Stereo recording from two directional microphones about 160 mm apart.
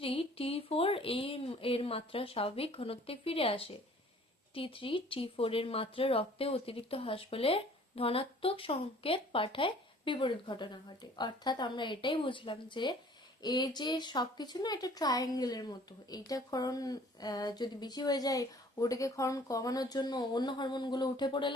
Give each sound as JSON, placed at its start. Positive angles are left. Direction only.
{"t": 0.0, "sound": "speech", "side_deg": 35}